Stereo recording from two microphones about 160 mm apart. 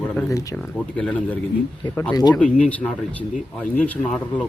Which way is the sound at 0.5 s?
5° left (ahead or behind).